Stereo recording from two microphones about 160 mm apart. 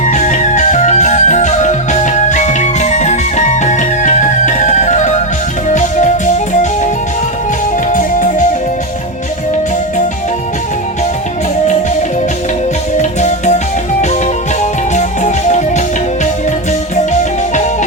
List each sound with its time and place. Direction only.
0.0 s music: 50° left (ahead or behind)
7.9 s music: 50° left (ahead or behind)
13.0 s music: 45° left (ahead or behind)
14.9 s music: 50° left (ahead or behind)